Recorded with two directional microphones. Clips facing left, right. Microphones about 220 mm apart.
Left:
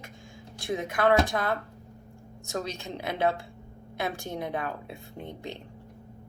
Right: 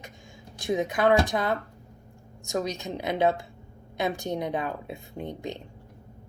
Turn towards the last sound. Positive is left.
turn(degrees=-15)  # may be behind; listen again after turning